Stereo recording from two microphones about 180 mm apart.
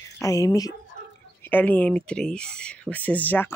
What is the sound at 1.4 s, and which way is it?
Speech, 10° left (ahead or behind).